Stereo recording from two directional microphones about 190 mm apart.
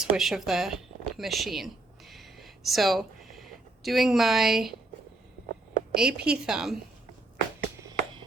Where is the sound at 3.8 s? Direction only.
Centre (ahead or behind).